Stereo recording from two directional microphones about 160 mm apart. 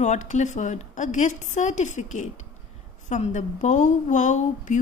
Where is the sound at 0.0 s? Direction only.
50° left (ahead or behind).